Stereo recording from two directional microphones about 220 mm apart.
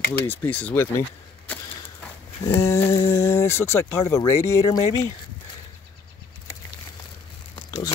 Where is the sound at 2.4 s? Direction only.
15° left (ahead or behind).